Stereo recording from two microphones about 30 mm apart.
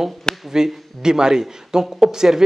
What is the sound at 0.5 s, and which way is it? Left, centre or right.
Speech, right.